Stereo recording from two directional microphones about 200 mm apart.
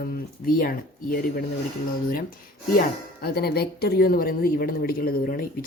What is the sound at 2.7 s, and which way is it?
Speech, 50° left (ahead or behind).